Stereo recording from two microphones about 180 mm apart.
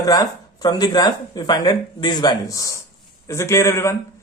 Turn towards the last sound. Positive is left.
turn(degrees=15)  # may be behind; listen again after turning